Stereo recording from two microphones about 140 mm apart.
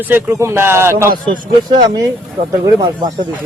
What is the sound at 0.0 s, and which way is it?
Speech, 15° right (ahead or behind).